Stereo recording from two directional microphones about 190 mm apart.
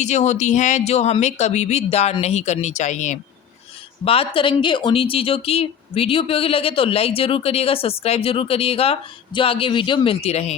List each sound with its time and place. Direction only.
0.0 s speech: 35° left (ahead or behind)